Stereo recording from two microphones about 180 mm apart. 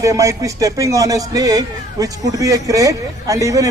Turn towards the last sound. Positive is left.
turn(degrees=-20)  # may be behind; listen again after turning